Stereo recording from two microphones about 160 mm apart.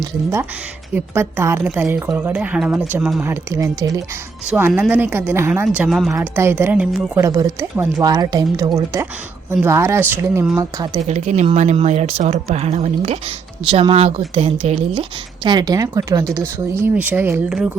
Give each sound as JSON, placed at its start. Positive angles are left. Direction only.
{"t": 0.0, "sound": "speech", "side_deg": -20}
{"t": 4.4, "sound": "speech", "side_deg": -10}
{"t": 5.6, "sound": "speech", "side_deg": -5}
{"t": 6.1, "sound": "speech", "side_deg": -15}
{"t": 11.1, "sound": "speech", "side_deg": -45}
{"t": 15.4, "sound": "speech", "side_deg": -25}
{"t": 16.8, "sound": "speech", "side_deg": -10}